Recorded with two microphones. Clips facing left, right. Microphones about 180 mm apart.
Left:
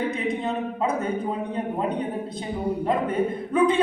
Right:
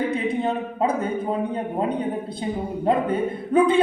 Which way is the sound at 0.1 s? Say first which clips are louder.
Right 3 dB; 30° right (ahead or behind).